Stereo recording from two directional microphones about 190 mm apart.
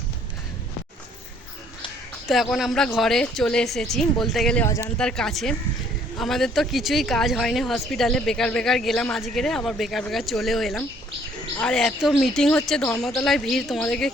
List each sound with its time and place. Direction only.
2.2 s speech: centre (ahead or behind)
4.6 s speech: 15° left (ahead or behind)
4.9 s speech: 5° left (ahead or behind)